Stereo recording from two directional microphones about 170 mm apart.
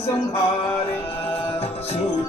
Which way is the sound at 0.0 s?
35° left (ahead or behind).